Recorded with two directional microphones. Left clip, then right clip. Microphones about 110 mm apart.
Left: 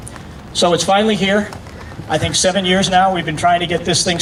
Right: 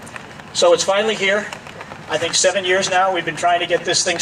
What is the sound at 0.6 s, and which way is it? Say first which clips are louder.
Speech: left 1 dB; 35° right (ahead or behind).